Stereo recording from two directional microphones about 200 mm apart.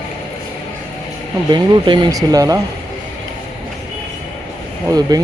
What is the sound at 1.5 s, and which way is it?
Speech, 25° right (ahead or behind).